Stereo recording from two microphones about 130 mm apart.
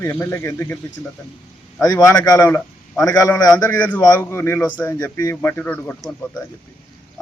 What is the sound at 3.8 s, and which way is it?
A man's voice, 10° left (ahead or behind).